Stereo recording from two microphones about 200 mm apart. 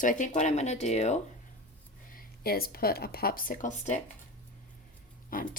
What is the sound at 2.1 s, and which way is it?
Speech, 50° left (ahead or behind).